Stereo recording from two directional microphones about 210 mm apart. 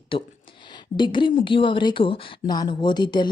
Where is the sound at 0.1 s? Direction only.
25° left (ahead or behind).